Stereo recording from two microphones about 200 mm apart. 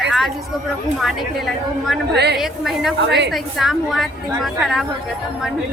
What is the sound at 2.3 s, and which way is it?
A woman's voice, centre (ahead or behind).